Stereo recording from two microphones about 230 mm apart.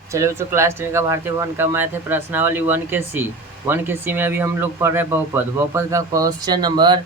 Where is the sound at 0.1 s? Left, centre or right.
Centre.